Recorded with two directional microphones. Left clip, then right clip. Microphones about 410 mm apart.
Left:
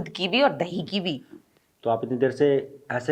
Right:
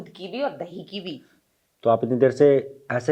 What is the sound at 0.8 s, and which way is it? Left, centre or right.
Speech, left.